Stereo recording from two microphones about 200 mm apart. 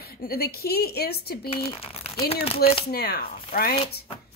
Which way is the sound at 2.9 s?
50° left (ahead or behind).